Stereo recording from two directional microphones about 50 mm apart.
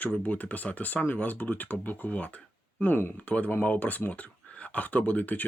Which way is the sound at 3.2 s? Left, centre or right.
Left.